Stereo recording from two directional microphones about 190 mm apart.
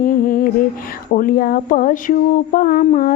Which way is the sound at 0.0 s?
50° left (ahead or behind).